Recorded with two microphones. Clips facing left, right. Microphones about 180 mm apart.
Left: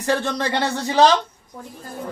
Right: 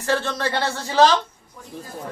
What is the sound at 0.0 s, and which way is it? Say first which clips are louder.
Speech: left 1 dB; 15° left (ahead or behind).